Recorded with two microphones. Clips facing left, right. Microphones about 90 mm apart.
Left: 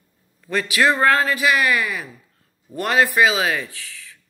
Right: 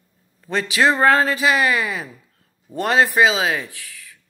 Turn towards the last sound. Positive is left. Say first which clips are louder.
# even
turn(degrees=-15)  # may be behind; listen again after turning